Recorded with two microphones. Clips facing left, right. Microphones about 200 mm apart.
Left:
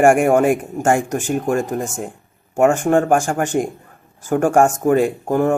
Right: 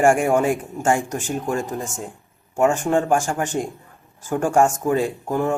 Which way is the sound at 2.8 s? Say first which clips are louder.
Left 4 dB; 55° left (ahead or behind).